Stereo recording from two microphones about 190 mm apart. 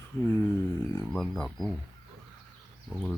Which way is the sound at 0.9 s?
5° left (ahead or behind).